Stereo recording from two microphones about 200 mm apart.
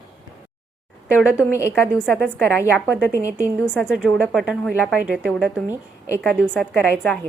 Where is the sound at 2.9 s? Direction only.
10° right (ahead or behind).